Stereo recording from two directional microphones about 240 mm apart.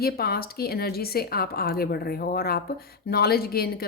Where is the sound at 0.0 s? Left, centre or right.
Left.